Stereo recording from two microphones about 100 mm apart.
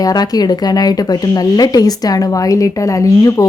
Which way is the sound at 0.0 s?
40° left (ahead or behind).